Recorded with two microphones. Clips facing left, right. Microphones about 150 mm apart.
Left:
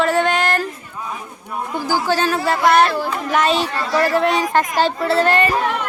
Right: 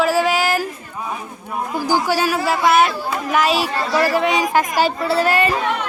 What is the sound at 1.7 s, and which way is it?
Speech, 15° right (ahead or behind).